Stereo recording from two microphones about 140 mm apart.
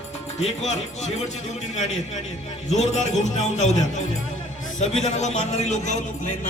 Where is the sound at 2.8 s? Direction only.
55° left (ahead or behind).